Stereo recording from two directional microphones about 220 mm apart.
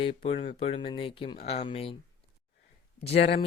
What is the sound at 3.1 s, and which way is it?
Speech, 50° left (ahead or behind).